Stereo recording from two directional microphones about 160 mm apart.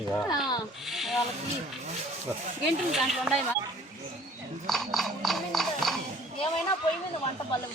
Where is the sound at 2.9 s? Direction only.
Centre (ahead or behind).